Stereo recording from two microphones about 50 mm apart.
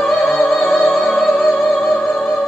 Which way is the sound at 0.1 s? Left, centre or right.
Centre.